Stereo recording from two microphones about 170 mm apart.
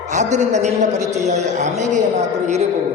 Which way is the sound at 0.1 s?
45° right (ahead or behind).